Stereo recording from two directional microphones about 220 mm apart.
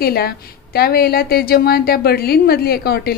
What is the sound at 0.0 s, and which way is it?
A woman's voice, 45° left (ahead or behind).